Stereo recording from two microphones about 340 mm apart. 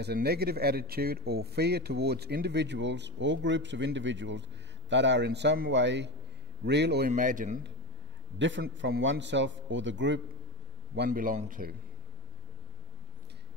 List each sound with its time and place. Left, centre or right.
0.0 s a man's voice: right